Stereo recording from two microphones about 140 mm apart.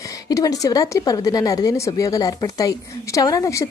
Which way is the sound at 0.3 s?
25° left (ahead or behind).